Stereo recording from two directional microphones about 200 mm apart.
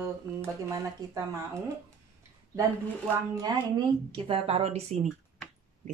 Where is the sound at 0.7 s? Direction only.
15° right (ahead or behind).